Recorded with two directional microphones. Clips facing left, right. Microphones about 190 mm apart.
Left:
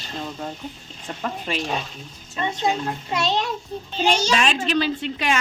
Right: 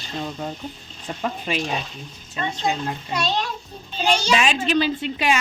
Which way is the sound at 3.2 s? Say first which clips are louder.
Left 1 dB; 25° left (ahead or behind).